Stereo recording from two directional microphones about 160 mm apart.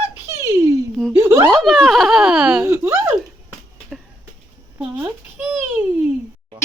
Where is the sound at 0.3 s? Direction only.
15° right (ahead or behind).